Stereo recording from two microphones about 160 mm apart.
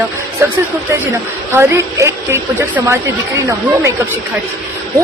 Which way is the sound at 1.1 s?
15° right (ahead or behind).